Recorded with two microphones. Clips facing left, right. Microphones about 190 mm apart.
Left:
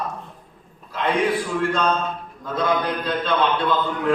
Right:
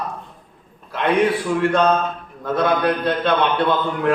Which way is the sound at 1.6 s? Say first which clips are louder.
Right 7 dB; 65° right (ahead or behind).